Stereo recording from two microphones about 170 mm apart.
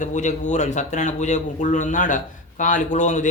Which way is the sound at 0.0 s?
45° left (ahead or behind).